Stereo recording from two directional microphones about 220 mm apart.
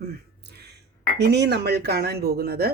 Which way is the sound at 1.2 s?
50° right (ahead or behind).